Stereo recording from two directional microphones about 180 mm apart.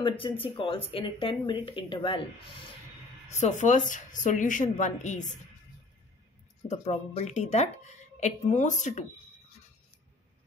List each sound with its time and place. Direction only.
0.2 s speech: 30° left (ahead or behind)
3.3 s speech: 40° left (ahead or behind)
6.7 s speech: 40° left (ahead or behind)